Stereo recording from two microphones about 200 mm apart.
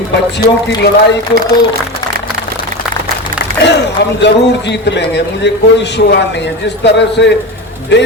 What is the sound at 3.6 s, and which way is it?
A man's voice, 60° left (ahead or behind).